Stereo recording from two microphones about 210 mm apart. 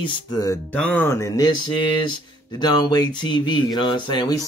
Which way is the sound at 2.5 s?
20° left (ahead or behind).